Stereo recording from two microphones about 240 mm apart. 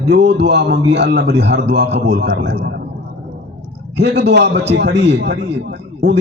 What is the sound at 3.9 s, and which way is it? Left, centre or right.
A man's voice, right.